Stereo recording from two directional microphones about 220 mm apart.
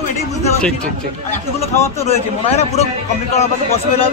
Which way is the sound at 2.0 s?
30° left (ahead or behind).